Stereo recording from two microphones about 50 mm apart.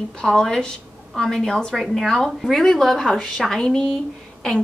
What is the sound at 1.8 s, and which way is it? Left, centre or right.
Speech, centre.